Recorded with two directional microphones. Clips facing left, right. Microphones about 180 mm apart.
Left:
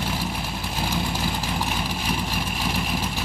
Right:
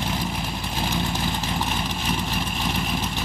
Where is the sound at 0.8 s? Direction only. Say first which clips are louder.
Even; 10° left (ahead or behind).